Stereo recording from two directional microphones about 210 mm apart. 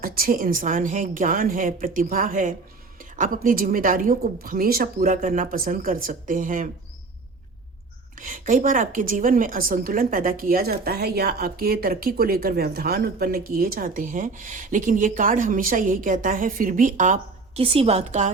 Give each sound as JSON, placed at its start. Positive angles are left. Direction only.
{"t": 0.0, "sound": "a woman's voice", "side_deg": -45}
{"t": 8.1, "sound": "a woman's voice", "side_deg": -40}